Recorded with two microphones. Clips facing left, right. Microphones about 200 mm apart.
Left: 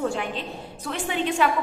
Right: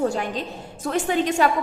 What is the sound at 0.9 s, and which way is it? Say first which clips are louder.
Speech: right 5 dB; 40° right (ahead or behind).